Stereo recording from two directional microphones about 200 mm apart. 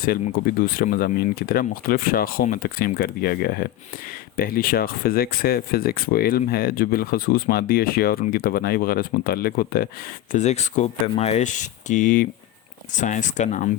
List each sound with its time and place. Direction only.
0.0 s speech: 45° left (ahead or behind)